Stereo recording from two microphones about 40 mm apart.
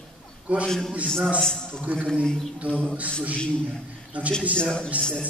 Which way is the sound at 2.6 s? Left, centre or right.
Right.